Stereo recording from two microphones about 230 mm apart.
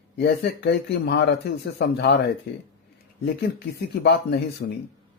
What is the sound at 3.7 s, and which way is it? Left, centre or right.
Speech, left.